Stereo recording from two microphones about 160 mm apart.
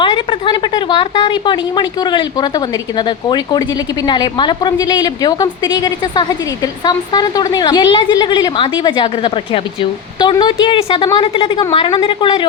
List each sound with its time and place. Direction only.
0.0 s a woman's voice: 30° left (ahead or behind)